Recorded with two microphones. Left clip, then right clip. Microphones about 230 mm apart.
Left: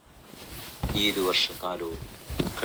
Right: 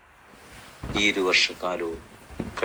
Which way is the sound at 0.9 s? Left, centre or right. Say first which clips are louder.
Right 4 dB; centre.